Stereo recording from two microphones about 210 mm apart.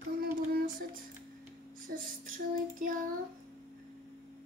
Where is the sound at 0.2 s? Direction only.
45° right (ahead or behind).